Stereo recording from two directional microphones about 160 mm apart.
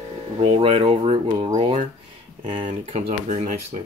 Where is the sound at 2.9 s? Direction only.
45° right (ahead or behind).